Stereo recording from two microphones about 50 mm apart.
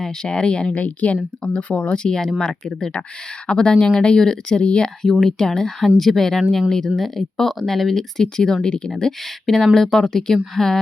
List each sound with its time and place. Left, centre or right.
0.0 s speech: centre
2.0 s speech: centre
5.0 s speech: centre